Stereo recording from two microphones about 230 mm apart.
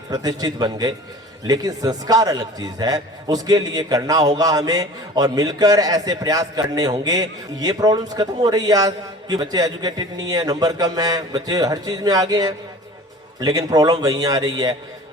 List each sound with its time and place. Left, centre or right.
0.1 s a man's voice: centre